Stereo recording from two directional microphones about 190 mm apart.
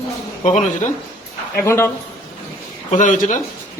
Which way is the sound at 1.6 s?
15° left (ahead or behind).